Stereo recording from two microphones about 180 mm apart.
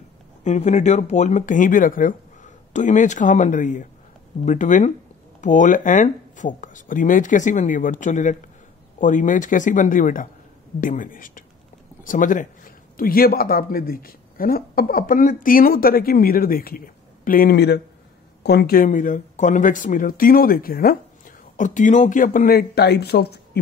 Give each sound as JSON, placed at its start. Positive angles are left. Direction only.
{"t": 0.4, "sound": "speech", "side_deg": 40}
{"t": 21.5, "sound": "speech", "side_deg": 45}